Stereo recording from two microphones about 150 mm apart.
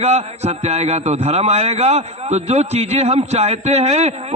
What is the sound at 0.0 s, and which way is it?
A man's voice, 45° right (ahead or behind).